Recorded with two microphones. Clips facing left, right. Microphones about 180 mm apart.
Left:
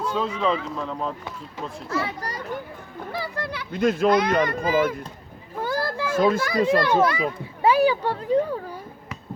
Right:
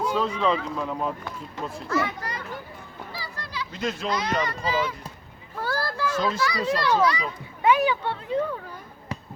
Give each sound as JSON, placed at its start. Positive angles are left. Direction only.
{"t": 0.2, "sound": "speech", "side_deg": 5}
{"t": 1.9, "sound": "a child's voice", "side_deg": 30}
{"t": 3.2, "sound": "speech", "side_deg": 60}
{"t": 5.5, "sound": "children playing", "side_deg": 20}
{"t": 6.1, "sound": "a child's voice", "side_deg": 50}
{"t": 7.6, "sound": "a child's voice", "side_deg": 35}